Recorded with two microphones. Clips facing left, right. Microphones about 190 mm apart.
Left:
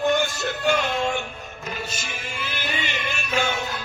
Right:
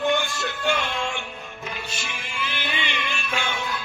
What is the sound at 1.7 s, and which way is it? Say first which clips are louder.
Music: left 3 dB; 40° left (ahead or behind).